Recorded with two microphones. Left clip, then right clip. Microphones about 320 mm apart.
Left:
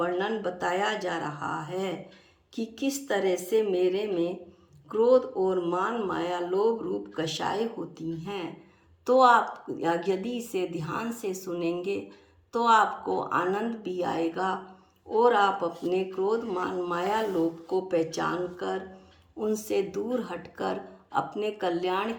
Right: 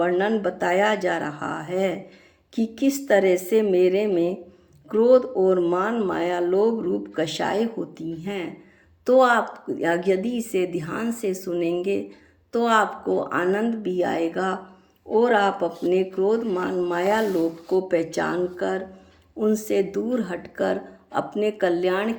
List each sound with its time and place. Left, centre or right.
0.2 s speech: centre